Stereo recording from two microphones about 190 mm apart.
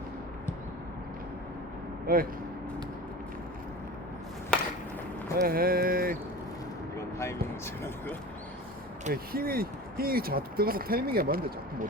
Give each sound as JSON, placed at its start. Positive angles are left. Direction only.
{"t": 2.1, "sound": "speech", "side_deg": -50}
{"t": 4.5, "sound": "a sound", "side_deg": 5}
{"t": 5.4, "sound": "speech", "side_deg": -50}
{"t": 9.3, "sound": "speech", "side_deg": -50}